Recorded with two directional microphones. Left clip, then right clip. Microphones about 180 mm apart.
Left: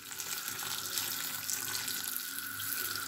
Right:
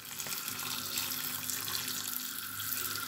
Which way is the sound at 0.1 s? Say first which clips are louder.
Even; 10° left (ahead or behind).